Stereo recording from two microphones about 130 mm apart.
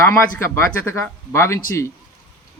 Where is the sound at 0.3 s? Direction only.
20° left (ahead or behind).